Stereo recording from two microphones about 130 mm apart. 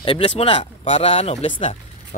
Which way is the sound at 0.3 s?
50° left (ahead or behind).